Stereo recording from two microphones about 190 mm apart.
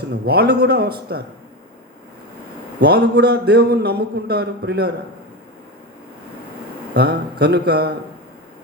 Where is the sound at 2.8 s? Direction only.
60° right (ahead or behind).